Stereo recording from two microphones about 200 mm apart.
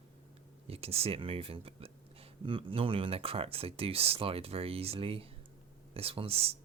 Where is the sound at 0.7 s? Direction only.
30° right (ahead or behind).